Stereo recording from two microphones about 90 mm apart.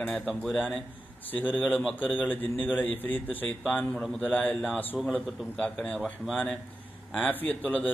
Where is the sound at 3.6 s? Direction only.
Centre (ahead or behind).